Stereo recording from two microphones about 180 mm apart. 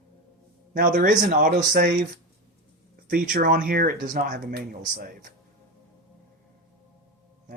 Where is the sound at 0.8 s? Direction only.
50° right (ahead or behind).